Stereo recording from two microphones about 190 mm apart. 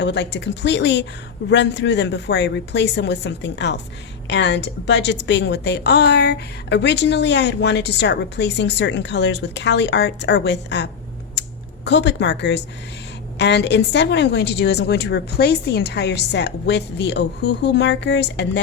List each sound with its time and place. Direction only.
0.0 s a woman's voice: 65° left (ahead or behind)
11.4 s a sound: 65° left (ahead or behind)
11.9 s speech: 65° left (ahead or behind)